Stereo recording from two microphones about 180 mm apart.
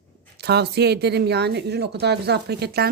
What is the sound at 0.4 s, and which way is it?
Speech, 65° right (ahead or behind).